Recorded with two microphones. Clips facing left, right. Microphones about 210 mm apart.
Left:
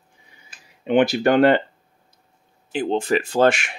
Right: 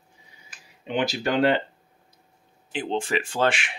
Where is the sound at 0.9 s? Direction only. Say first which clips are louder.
Left 8 dB; 60° left (ahead or behind).